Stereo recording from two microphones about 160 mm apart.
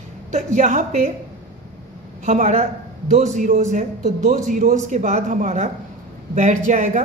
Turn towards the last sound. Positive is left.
turn(degrees=-45)  # may be behind; listen again after turning